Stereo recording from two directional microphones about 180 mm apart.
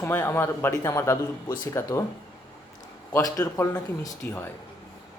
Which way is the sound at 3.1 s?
20° left (ahead or behind).